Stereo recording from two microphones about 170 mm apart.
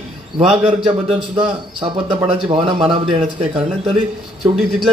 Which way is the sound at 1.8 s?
30° right (ahead or behind).